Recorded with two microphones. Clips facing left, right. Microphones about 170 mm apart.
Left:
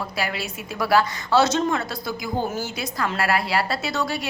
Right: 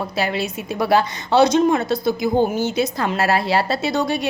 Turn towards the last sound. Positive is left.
turn(degrees=-20)  # may be behind; listen again after turning